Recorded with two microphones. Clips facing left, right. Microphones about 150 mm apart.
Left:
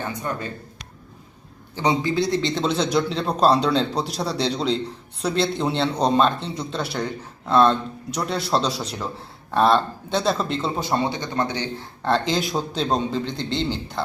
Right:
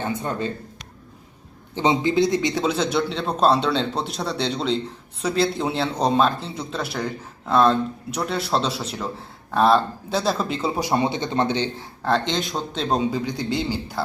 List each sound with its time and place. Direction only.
0.1 s speech: 25° right (ahead or behind)
1.7 s speech: 20° right (ahead or behind)
2.6 s a man's voice: 5° right (ahead or behind); by 11.9 s 20° right (ahead or behind)
12.0 s a man's voice: centre (ahead or behind)